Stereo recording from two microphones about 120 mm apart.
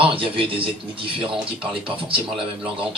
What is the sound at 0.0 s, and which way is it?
Speech, 50° right (ahead or behind).